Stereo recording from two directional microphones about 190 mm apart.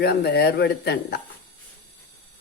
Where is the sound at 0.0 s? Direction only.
55° left (ahead or behind).